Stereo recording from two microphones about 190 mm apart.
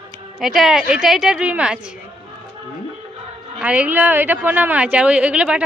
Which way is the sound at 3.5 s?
5° right (ahead or behind).